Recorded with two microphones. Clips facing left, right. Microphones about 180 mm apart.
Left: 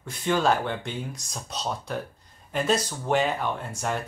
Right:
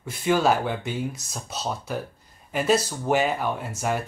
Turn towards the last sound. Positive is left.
turn(degrees=-5)  # may be behind; listen again after turning